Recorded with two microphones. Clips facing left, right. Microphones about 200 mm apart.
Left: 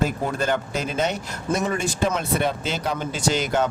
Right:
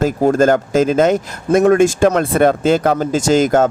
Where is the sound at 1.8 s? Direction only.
90° right.